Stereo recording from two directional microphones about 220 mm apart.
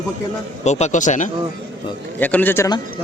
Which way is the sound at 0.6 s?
30° left (ahead or behind).